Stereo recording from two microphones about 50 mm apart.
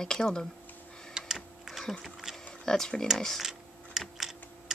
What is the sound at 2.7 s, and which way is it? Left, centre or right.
Speech, centre.